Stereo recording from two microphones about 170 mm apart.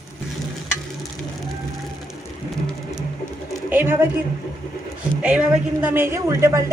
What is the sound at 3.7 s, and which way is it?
Speech, 10° right (ahead or behind).